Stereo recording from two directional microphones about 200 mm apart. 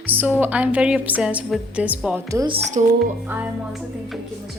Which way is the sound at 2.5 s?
35° right (ahead or behind).